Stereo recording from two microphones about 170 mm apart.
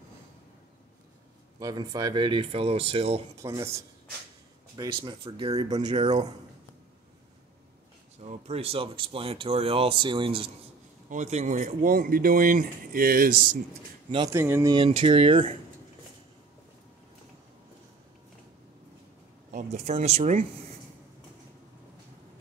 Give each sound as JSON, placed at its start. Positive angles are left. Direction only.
{"t": 1.6, "sound": "speech", "side_deg": -20}
{"t": 3.4, "sound": "speech", "side_deg": -15}
{"t": 4.7, "sound": "speech", "side_deg": -30}
{"t": 8.3, "sound": "speech", "side_deg": -35}
{"t": 11.1, "sound": "speech", "side_deg": -45}
{"t": 14.3, "sound": "speech", "side_deg": -15}
{"t": 14.8, "sound": "speech", "side_deg": -30}
{"t": 19.5, "sound": "speech", "side_deg": -40}